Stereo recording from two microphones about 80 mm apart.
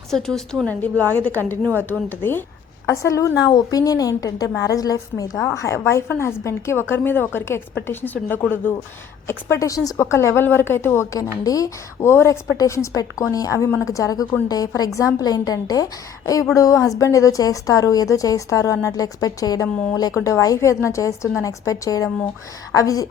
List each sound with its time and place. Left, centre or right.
0.1 s a woman's voice: centre
0.7 s speech: left
2.8 s a woman's voice: left
3.3 s a woman's voice: left
5.5 s a woman's voice: left
11.4 s a woman's voice: left
12.0 s a woman's voice: left